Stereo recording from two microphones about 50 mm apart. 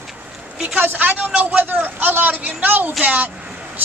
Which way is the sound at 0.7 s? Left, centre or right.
Right.